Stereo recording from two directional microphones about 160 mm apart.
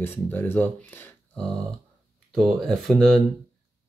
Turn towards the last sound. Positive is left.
turn(degrees=0)  # may be behind; listen again after turning